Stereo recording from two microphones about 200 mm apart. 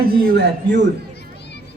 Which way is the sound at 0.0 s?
50° right (ahead or behind).